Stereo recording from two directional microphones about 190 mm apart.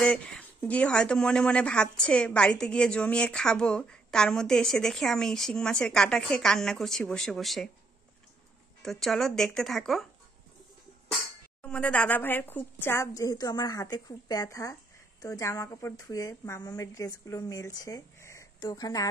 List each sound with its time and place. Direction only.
0.0 s speech: 5° left (ahead or behind)
8.8 s speech: centre (ahead or behind)
11.6 s a woman's voice: 5° left (ahead or behind)